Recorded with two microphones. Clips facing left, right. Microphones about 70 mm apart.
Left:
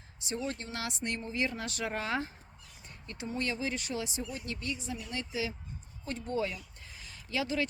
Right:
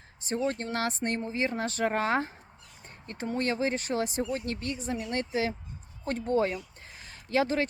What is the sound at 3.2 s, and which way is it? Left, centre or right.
Speech, right.